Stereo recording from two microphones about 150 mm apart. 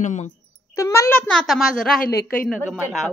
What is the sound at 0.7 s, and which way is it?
Speech, 20° left (ahead or behind).